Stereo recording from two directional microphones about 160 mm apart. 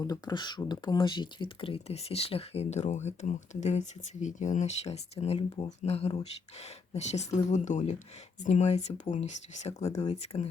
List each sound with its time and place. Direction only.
0.0 s speech: 25° left (ahead or behind); by 10.5 s 45° left (ahead or behind)